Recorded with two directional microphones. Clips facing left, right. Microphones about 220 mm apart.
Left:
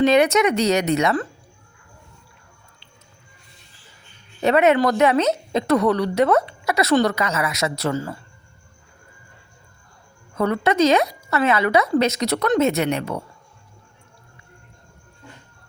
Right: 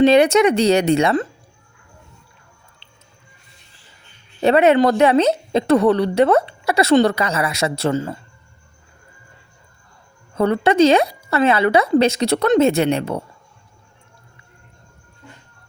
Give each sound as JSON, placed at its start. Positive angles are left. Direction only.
{"t": 0.0, "sound": "speech", "side_deg": -30}
{"t": 4.4, "sound": "a woman's voice", "side_deg": -30}
{"t": 10.3, "sound": "a woman's voice", "side_deg": -30}